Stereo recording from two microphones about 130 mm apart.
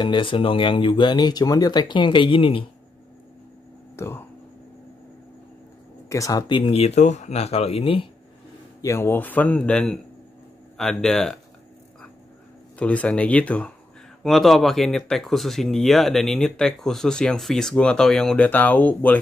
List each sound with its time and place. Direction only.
0.0 s speech: 40° left (ahead or behind)
3.9 s a sound: 20° left (ahead or behind)
6.0 s speech: 25° left (ahead or behind)
6.5 s speech: 45° left (ahead or behind)
8.8 s speech: 20° left (ahead or behind)
12.7 s speech: 10° left (ahead or behind)